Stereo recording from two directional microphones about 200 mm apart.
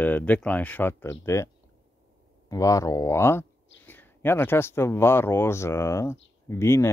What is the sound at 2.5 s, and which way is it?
Speech, 15° left (ahead or behind).